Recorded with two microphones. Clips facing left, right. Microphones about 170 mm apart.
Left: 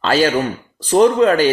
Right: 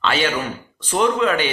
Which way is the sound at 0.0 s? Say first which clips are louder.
Left 6 dB; 35° left (ahead or behind).